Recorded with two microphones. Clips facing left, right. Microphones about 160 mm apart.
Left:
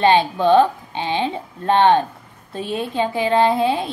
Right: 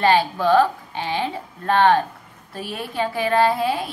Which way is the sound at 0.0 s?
20° left (ahead or behind).